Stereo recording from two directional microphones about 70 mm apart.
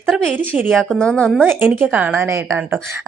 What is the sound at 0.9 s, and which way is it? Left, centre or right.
Speech, centre.